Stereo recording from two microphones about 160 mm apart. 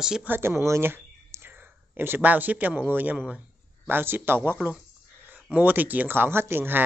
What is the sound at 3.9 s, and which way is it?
Speech, 15° right (ahead or behind).